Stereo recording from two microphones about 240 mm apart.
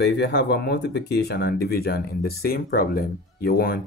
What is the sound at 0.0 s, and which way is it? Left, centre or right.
Speech, left.